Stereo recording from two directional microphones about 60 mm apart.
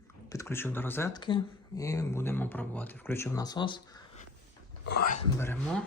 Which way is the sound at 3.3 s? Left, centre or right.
Left.